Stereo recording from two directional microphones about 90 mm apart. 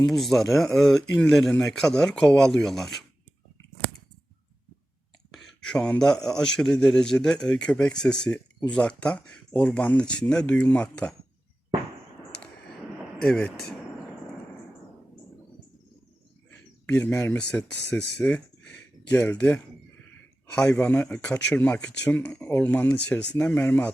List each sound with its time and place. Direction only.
0.0 s speech: centre (ahead or behind)
5.3 s a man's voice: 5° left (ahead or behind)
13.2 s a man's voice: 10° left (ahead or behind)
17.0 s speech: 25° left (ahead or behind)
17.3 s speech: 15° left (ahead or behind)
20.5 s a man's voice: 15° left (ahead or behind)